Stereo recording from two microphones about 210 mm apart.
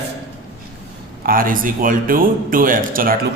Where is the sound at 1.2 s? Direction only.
40° right (ahead or behind).